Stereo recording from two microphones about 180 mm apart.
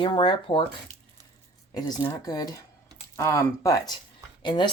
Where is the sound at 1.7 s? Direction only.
20° left (ahead or behind).